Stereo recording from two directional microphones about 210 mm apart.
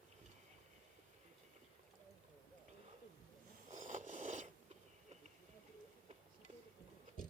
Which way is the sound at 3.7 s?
35° right (ahead or behind).